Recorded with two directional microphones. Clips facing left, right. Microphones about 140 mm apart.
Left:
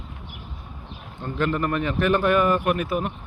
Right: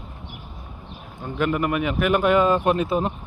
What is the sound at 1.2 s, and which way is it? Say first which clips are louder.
A man's voice: right 1 dB; 15° right (ahead or behind).